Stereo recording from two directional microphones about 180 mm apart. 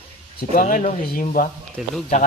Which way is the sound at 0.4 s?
50° left (ahead or behind).